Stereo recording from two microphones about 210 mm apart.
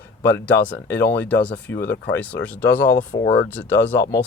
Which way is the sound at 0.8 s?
55° left (ahead or behind).